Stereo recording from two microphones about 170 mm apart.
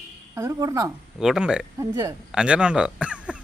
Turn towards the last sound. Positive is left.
turn(degrees=-5)  # may be behind; listen again after turning